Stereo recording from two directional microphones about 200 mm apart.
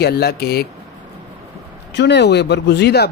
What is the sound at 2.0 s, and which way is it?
Speech, 60° left (ahead or behind).